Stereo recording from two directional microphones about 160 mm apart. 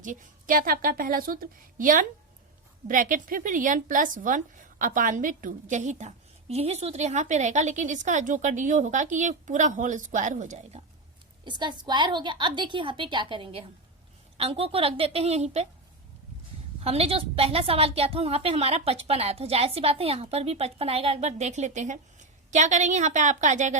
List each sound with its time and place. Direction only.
0.0 s a woman's voice: 55° right (ahead or behind)
11.4 s a woman's voice: 30° right (ahead or behind)
16.8 s a woman's voice: 40° right (ahead or behind)